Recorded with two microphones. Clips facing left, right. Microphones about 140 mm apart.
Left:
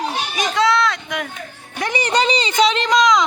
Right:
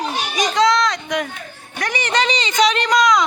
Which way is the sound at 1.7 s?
25° left (ahead or behind).